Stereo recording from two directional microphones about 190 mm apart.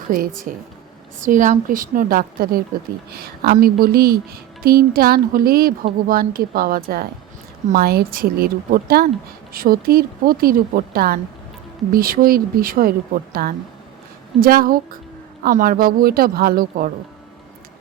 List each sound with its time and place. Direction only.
0.1 s speech: 45° right (ahead or behind)